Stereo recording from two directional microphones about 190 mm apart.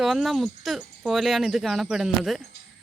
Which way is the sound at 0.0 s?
Centre (ahead or behind).